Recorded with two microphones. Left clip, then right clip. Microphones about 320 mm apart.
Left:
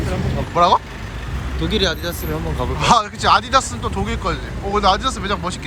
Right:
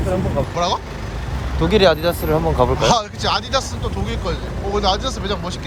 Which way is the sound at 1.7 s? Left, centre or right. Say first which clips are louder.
Right 7 dB; right.